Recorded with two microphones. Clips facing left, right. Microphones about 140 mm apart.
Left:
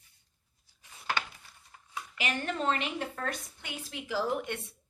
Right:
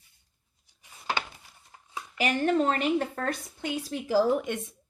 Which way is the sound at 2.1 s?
40° right (ahead or behind).